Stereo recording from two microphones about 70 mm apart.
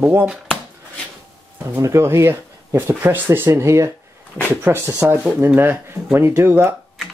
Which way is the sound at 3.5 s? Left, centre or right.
Right.